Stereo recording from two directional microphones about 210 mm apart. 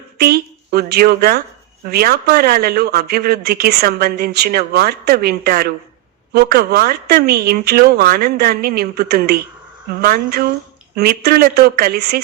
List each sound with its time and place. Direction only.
0.2 s a woman's voice: 50° right (ahead or behind)